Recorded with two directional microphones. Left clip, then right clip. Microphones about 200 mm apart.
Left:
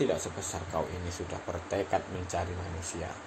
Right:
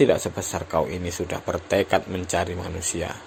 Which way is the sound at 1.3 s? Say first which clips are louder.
Right 11 dB; 50° right (ahead or behind).